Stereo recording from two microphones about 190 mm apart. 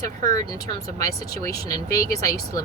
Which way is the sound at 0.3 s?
20° left (ahead or behind).